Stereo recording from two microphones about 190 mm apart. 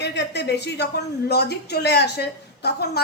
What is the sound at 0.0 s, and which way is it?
Speech, 65° left (ahead or behind).